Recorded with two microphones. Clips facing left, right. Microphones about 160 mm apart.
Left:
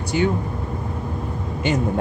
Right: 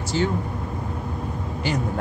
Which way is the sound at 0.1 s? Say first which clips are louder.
Left 3 dB; 10° left (ahead or behind).